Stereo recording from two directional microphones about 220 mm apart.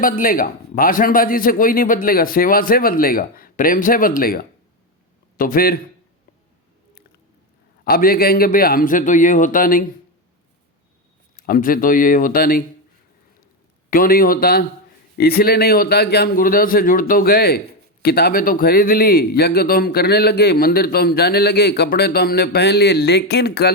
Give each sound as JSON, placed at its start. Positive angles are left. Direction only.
{"t": 0.0, "sound": "a man's voice", "side_deg": 40}
{"t": 7.9, "sound": "a man's voice", "side_deg": 45}
{"t": 11.3, "sound": "a man's voice", "side_deg": 40}
{"t": 13.9, "sound": "a man's voice", "side_deg": 40}